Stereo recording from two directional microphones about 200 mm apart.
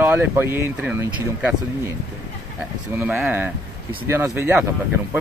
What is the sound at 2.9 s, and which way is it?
Speech, 10° right (ahead or behind).